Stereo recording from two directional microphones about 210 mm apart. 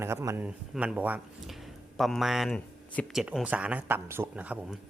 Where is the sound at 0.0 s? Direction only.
10° right (ahead or behind).